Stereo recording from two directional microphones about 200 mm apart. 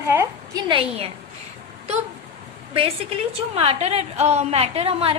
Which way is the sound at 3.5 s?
30° right (ahead or behind).